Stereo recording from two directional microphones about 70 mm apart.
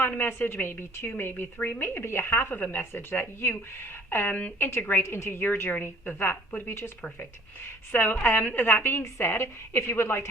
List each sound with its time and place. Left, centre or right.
0.0 s speech: left
7.9 s a woman's voice: left